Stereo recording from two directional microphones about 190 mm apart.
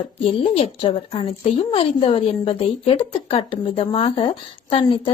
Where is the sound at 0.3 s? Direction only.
30° left (ahead or behind).